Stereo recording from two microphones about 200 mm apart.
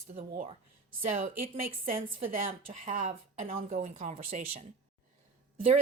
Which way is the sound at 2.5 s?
30° right (ahead or behind).